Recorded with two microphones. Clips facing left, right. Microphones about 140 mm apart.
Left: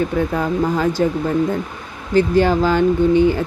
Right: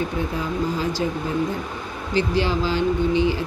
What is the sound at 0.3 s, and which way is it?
Speech, 55° left (ahead or behind).